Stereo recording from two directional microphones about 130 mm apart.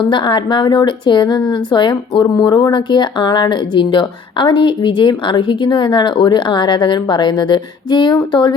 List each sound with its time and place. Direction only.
0.1 s speech: 35° left (ahead or behind)